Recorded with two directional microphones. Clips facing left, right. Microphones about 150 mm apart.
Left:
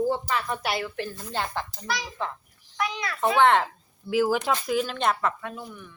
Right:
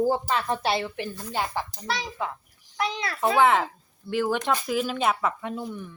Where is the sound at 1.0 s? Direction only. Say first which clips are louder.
Right 1 dB; 10° right (ahead or behind).